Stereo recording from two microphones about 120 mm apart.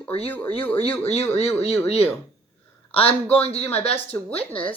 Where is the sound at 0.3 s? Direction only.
15° left (ahead or behind).